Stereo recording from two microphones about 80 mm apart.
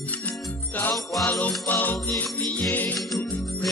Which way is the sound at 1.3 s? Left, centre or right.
Left.